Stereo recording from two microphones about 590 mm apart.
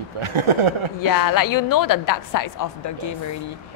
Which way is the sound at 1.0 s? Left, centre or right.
Left.